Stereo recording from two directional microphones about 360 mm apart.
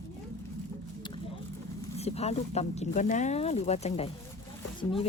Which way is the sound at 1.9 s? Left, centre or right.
Centre.